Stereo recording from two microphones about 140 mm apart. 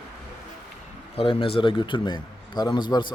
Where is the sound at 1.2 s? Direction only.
40° left (ahead or behind).